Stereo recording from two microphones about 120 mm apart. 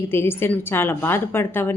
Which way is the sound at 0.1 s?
20° left (ahead or behind).